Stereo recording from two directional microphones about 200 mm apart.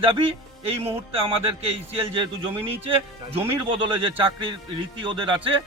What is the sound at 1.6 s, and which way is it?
A man's voice, 25° right (ahead or behind).